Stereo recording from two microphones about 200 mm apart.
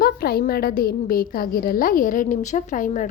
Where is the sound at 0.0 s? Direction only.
50° left (ahead or behind).